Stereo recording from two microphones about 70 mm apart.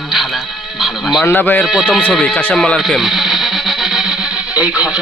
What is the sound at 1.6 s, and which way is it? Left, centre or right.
Speech, centre.